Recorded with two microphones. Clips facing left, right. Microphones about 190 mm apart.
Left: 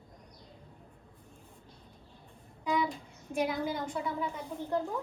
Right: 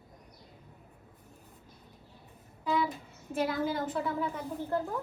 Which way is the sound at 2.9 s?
5° right (ahead or behind).